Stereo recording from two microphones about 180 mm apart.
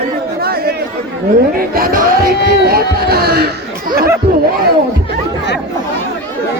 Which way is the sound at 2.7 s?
60° right (ahead or behind).